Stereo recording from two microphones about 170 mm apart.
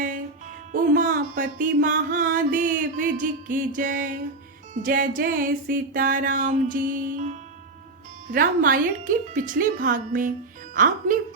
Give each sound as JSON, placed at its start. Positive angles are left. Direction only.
{"t": 0.7, "sound": "music", "side_deg": -50}